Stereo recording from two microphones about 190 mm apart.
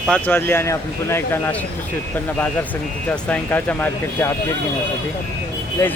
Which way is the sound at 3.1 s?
10° left (ahead or behind).